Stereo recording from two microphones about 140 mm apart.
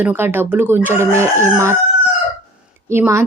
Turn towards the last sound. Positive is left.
turn(degrees=-20)  # may be behind; listen again after turning